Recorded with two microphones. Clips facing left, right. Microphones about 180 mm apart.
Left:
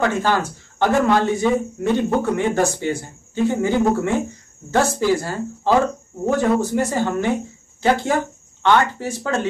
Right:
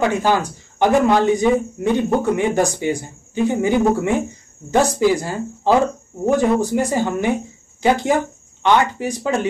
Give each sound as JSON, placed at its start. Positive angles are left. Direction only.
{"t": 0.0, "sound": "speech", "side_deg": -15}